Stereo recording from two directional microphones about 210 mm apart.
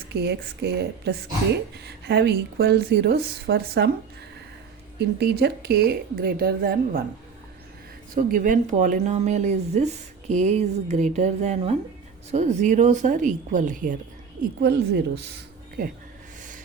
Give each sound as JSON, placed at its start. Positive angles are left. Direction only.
{"t": 0.1, "sound": "speech", "side_deg": -50}
{"t": 4.9, "sound": "speech", "side_deg": -50}
{"t": 8.1, "sound": "speech", "side_deg": -40}
{"t": 14.6, "sound": "speech", "side_deg": -50}